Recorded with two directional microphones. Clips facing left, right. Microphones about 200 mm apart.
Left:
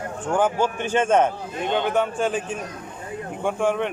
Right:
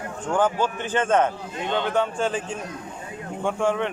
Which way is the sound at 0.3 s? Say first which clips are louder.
Left 1 dB; 15° left (ahead or behind).